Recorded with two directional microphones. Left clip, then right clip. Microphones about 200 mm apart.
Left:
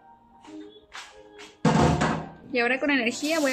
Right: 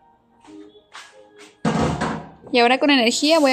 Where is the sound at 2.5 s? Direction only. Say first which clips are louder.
Right 8 dB; 35° right (ahead or behind).